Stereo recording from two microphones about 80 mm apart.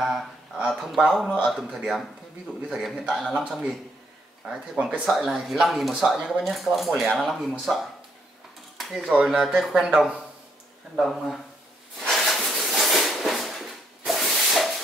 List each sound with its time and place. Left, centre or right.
0.0 s speech: centre
2.7 s speech: centre
4.7 s speech: centre
5.0 s speech: centre
9.0 s speech: centre
12.0 s a sound: centre